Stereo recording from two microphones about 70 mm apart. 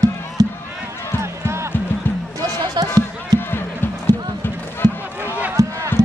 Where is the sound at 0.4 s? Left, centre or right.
Right.